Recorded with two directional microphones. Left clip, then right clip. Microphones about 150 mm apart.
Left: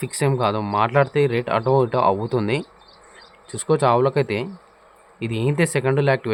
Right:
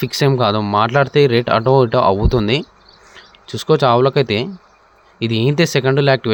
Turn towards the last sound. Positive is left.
turn(degrees=-30)  # may be behind; listen again after turning